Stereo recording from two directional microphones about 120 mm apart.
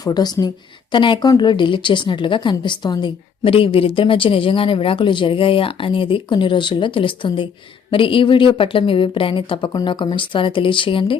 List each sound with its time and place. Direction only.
0.0 s a woman's voice: 30° left (ahead or behind)